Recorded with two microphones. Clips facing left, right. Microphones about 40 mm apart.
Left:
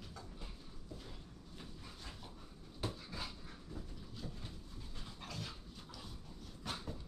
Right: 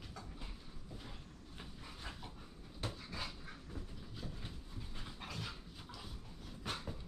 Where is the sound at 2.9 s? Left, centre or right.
Centre.